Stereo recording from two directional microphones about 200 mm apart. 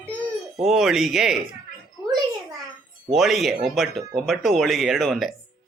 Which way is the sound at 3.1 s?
Centre (ahead or behind).